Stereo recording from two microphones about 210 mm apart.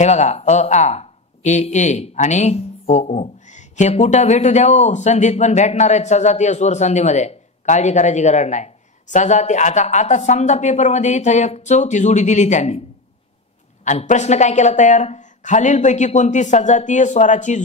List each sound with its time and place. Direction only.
0.0 s speech: 35° left (ahead or behind)
13.8 s speech: 35° left (ahead or behind)